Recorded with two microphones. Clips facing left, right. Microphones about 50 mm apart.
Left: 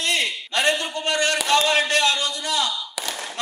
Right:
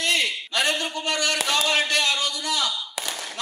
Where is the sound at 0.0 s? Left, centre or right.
Left.